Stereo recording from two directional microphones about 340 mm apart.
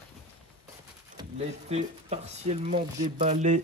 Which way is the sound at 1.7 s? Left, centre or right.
Centre.